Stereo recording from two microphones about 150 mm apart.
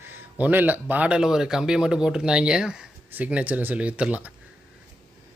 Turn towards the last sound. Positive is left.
turn(degrees=-10)  # may be behind; listen again after turning